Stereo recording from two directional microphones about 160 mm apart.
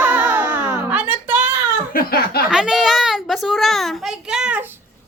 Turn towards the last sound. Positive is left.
turn(degrees=-5)  # may be behind; listen again after turning